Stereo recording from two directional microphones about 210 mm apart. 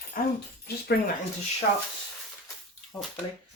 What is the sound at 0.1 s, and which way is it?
Speech, 40° left (ahead or behind).